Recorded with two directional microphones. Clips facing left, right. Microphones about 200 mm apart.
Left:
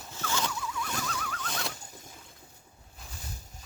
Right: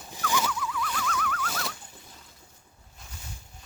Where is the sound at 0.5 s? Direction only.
25° left (ahead or behind).